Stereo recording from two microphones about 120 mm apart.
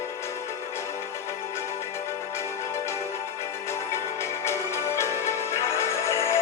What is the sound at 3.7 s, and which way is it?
Music, 20° left (ahead or behind).